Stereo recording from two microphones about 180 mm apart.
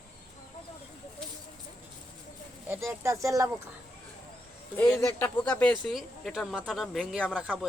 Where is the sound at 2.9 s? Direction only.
15° right (ahead or behind).